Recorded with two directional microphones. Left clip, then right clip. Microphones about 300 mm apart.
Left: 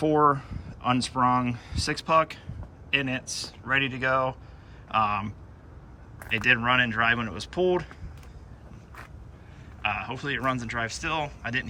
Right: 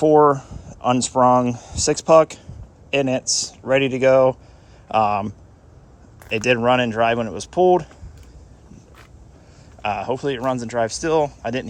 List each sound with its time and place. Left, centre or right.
0.0 s speech: centre
9.8 s speech: centre